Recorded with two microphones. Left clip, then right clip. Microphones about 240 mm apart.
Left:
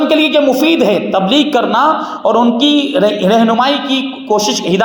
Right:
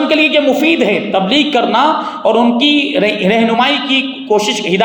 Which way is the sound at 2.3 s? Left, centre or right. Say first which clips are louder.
Even; centre.